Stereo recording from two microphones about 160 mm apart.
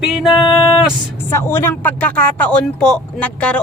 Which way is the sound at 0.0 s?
Centre (ahead or behind).